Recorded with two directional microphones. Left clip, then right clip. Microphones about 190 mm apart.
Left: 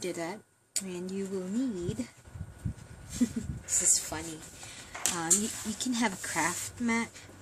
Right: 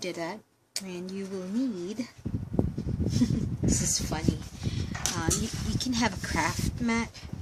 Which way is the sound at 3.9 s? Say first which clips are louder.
Right 1 dB; centre (ahead or behind).